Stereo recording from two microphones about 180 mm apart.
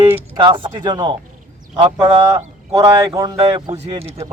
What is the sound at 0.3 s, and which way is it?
Speech, 25° right (ahead or behind).